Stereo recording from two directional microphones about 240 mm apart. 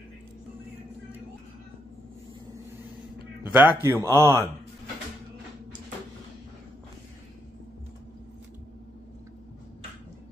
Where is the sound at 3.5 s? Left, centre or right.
Centre.